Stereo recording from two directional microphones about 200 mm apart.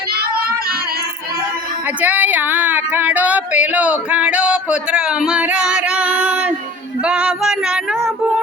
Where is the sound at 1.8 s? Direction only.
10° right (ahead or behind).